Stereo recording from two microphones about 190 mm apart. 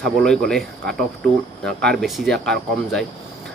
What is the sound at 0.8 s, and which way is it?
Speech, 55° right (ahead or behind).